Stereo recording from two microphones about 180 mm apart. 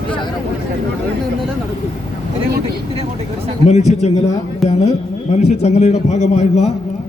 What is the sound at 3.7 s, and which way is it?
Speech, 40° left (ahead or behind).